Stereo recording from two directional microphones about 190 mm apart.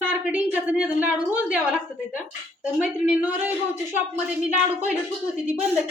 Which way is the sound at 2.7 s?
10° right (ahead or behind).